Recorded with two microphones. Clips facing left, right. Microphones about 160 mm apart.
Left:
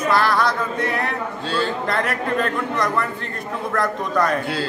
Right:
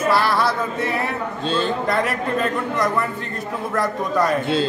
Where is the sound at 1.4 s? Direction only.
20° right (ahead or behind).